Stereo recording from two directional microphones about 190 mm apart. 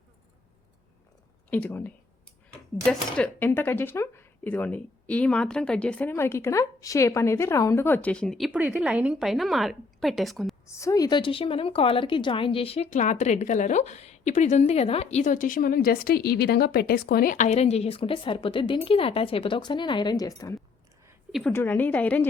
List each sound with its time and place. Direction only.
1.5 s speech: 10° left (ahead or behind)
10.7 s a woman's voice: 15° left (ahead or behind)